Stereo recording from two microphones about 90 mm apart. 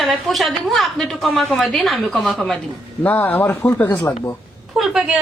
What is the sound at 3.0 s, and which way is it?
Speech, 20° left (ahead or behind).